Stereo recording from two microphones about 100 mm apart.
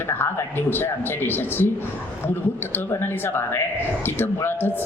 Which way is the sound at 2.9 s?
25° left (ahead or behind).